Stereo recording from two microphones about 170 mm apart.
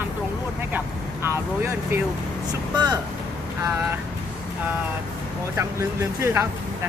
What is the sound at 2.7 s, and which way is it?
Speech, 25° right (ahead or behind).